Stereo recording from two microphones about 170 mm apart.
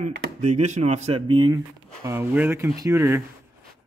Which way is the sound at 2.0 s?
15° right (ahead or behind).